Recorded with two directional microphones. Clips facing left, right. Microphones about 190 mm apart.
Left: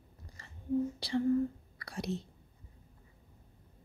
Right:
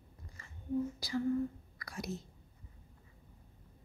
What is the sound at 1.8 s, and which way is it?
Whispering, 30° left (ahead or behind).